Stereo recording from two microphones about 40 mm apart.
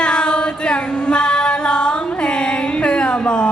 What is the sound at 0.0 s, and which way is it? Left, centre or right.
Music, left.